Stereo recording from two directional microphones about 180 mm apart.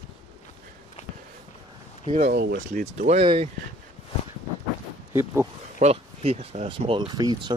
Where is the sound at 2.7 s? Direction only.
40° right (ahead or behind).